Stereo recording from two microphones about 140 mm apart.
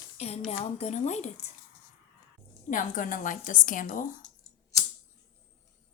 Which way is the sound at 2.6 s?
70° left (ahead or behind).